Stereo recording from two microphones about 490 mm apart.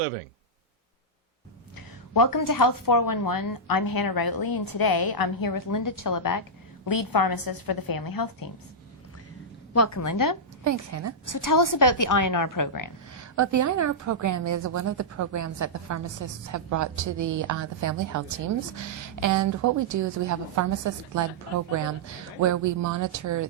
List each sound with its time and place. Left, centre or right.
2.1 s a woman's voice: left
9.7 s a woman's voice: left
10.6 s a woman's voice: right
11.3 s a woman's voice: left
13.1 s a woman's voice: right
22.4 s a woman's voice: right